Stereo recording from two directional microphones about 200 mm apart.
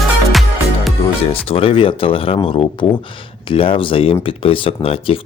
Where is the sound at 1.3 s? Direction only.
30° left (ahead or behind).